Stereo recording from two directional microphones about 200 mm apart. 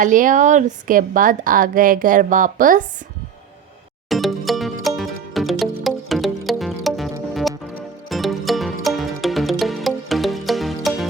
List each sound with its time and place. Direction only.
0.0 s a woman's voice: 40° right (ahead or behind)
4.1 s music: centre (ahead or behind)